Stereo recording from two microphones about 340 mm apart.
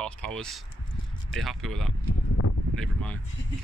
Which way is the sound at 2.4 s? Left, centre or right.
Left.